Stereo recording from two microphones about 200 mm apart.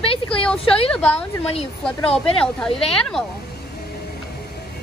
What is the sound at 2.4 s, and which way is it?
Speech, 5° left (ahead or behind).